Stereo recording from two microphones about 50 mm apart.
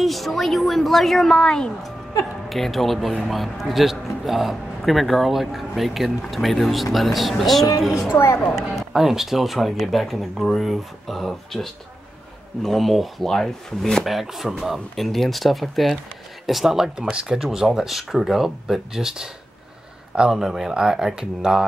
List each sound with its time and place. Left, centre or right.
0.0 s a man's voice: centre
2.5 s a man's voice: centre
8.1 s a woman's voice: left
8.5 s a man's voice: centre
14.0 s a man's voice: centre
17.4 s a man's voice: centre